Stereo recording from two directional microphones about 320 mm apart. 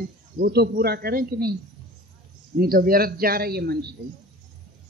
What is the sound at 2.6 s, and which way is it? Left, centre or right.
A man's voice, right.